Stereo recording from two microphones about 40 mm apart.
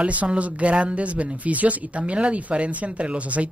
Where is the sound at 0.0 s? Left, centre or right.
Right.